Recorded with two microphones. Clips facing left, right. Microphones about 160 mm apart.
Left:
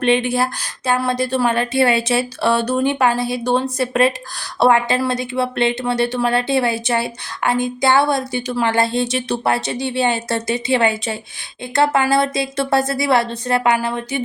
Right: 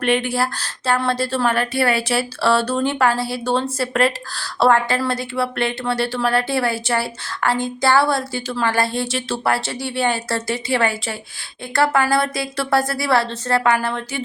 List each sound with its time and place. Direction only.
0.0 s a woman's voice: 20° left (ahead or behind)